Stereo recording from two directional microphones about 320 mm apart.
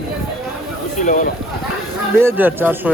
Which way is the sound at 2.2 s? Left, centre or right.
Centre.